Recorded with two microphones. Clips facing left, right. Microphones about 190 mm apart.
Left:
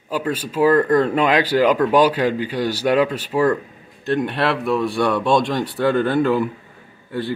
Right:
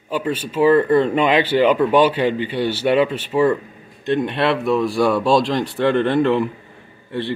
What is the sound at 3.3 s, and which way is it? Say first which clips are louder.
Speech: right 1 dB; 5° left (ahead or behind).